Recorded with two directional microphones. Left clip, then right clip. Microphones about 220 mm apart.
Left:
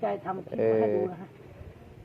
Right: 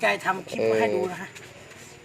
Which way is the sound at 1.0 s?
30° right (ahead or behind).